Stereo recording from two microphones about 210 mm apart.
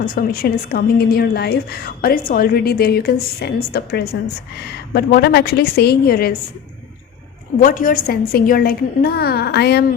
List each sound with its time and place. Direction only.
0.0 s a woman's voice: 45° left (ahead or behind)
7.6 s a woman's voice: 40° left (ahead or behind)